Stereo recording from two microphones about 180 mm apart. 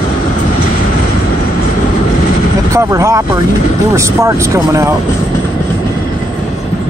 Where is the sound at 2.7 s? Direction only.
15° right (ahead or behind).